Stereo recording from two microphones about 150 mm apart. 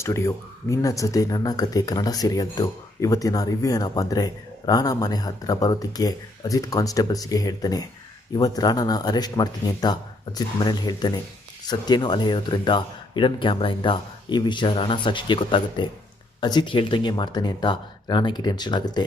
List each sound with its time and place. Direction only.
0.0 s speech: 20° left (ahead or behind)